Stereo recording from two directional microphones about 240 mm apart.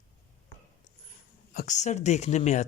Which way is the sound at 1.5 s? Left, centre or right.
Left.